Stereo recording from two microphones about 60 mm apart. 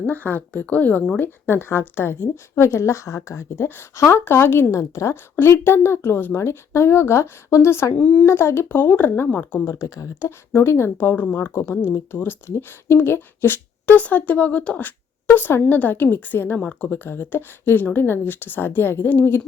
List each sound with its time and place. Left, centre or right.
0.0 s speech: left
1.5 s a woman's voice: left
4.8 s a woman's voice: left
5.4 s a woman's voice: left
7.9 s speech: left
8.2 s speech: left
9.6 s a woman's voice: left
11.0 s speech: left
11.3 s a woman's voice: left
14.0 s speech: left